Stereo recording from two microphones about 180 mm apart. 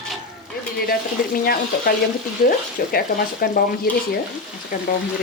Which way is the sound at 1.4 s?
55° left (ahead or behind).